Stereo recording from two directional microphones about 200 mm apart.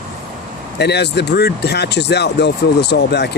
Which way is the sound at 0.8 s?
55° left (ahead or behind).